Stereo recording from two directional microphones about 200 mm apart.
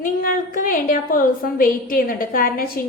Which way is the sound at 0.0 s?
45° left (ahead or behind).